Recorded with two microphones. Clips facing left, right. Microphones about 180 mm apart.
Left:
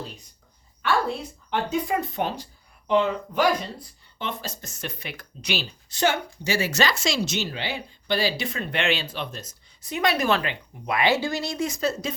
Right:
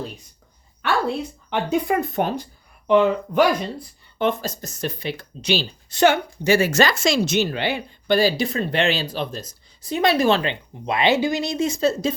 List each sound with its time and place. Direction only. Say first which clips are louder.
1.5 s speech: right 4 dB; 55° right (ahead or behind)
4.2 s a woman's voice: right 10 dB; 45° right (ahead or behind); by 5.6 s 30° right (ahead or behind)
5.9 s a woman's voice: right 7 dB; 60° right (ahead or behind); by 12.1 s 30° right (ahead or behind)